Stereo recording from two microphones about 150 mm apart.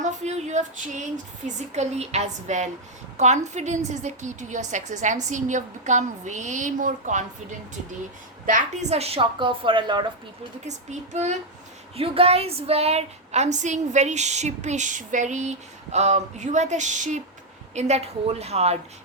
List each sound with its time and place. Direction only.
0.0 s a woman's voice: 50° right (ahead or behind)
8.4 s a woman's voice: 55° right (ahead or behind); by 10.1 s 30° right (ahead or behind)
10.7 s a woman's voice: 50° right (ahead or behind)
11.9 s a woman's voice: 40° right (ahead or behind)